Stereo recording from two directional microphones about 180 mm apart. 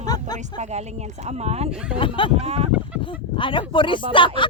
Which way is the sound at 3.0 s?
30° left (ahead or behind).